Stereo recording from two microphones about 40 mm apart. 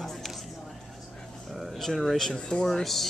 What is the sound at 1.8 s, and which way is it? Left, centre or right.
Speech, centre.